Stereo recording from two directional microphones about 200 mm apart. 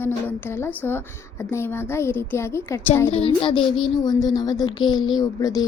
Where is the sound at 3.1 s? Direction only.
30° left (ahead or behind).